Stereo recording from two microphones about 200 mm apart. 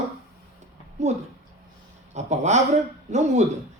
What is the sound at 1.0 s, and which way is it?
Speech, 35° right (ahead or behind).